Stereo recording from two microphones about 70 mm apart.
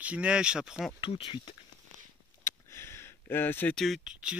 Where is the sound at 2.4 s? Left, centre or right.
Left.